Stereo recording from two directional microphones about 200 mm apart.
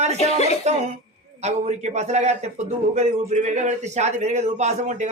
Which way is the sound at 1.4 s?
35° right (ahead or behind).